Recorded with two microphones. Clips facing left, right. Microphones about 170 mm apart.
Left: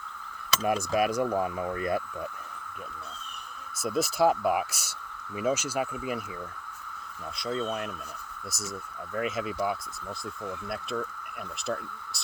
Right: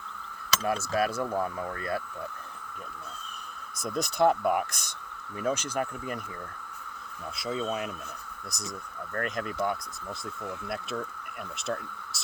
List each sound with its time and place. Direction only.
0.6 s speech: 20° left (ahead or behind)
3.8 s speech: 5° left (ahead or behind)
7.3 s speech: 5° right (ahead or behind)
9.1 s speech: 5° left (ahead or behind)
11.6 s speech: centre (ahead or behind)